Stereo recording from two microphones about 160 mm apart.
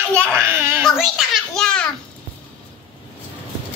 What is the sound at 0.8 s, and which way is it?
A child's voice, centre (ahead or behind).